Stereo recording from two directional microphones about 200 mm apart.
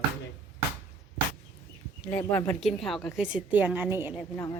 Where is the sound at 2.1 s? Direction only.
10° left (ahead or behind); by 4.2 s 10° right (ahead or behind).